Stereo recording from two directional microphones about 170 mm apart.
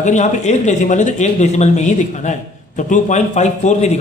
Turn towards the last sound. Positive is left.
turn(degrees=45)  # may be behind; listen again after turning